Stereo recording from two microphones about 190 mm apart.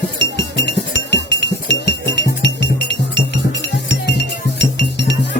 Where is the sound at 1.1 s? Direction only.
65° left (ahead or behind).